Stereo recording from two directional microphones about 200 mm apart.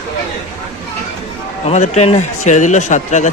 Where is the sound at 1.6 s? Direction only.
35° left (ahead or behind).